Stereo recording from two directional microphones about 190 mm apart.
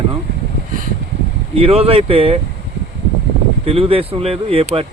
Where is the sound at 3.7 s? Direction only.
30° right (ahead or behind).